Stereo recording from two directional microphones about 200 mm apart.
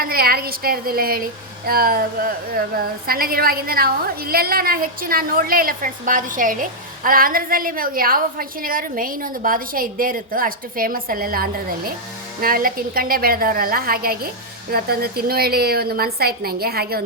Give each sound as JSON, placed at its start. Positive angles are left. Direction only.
{"t": 0.0, "sound": "a woman's voice", "side_deg": -50}